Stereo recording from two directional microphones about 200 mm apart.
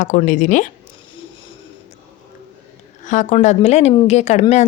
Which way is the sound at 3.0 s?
40° left (ahead or behind).